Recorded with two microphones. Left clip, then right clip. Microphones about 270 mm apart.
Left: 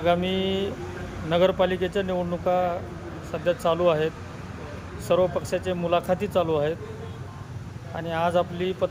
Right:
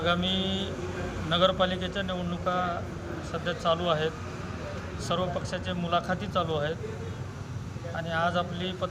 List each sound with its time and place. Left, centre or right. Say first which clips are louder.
0.0 s speech: left 4 dB; centre
7.9 s speech: left 4 dB; centre